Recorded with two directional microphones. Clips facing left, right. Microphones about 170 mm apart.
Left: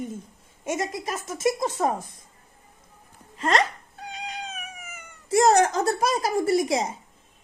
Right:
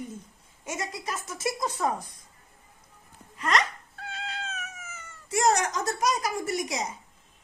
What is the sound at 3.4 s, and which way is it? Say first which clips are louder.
Speech: left 4 dB; 30° left (ahead or behind).